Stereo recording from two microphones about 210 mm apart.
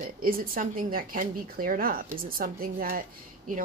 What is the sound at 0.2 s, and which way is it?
A woman's voice, 40° right (ahead or behind).